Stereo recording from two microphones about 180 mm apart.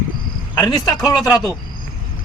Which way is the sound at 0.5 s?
20° left (ahead or behind).